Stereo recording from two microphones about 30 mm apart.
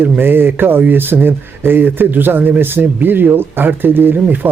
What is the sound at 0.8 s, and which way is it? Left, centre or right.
Speech, right.